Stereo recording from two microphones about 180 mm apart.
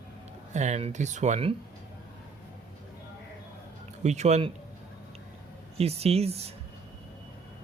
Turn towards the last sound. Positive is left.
turn(degrees=-35)  # may be behind; listen again after turning